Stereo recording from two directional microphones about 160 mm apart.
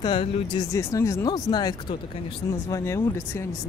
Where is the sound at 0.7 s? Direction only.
20° left (ahead or behind).